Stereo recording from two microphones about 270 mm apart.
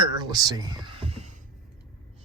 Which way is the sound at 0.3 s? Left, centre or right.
Centre.